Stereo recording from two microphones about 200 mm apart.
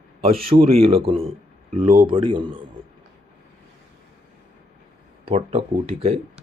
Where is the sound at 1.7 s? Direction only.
45° right (ahead or behind).